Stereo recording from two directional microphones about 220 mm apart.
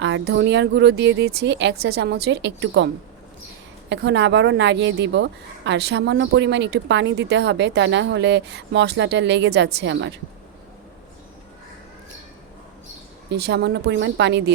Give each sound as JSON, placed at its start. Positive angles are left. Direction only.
{"t": 0.0, "sound": "a woman's voice", "side_deg": -55}
{"t": 13.3, "sound": "a woman's voice", "side_deg": -50}